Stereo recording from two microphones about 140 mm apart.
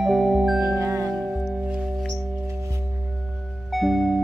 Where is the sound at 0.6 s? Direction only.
20° right (ahead or behind).